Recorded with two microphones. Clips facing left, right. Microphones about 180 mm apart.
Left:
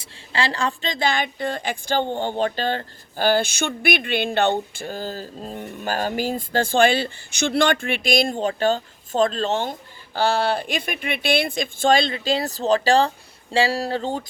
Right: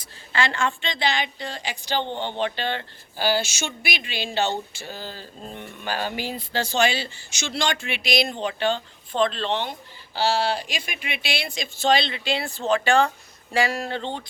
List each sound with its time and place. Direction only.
0.0 s speech: 30° left (ahead or behind)